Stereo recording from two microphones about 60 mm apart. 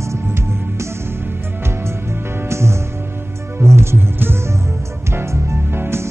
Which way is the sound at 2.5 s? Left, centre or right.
Right.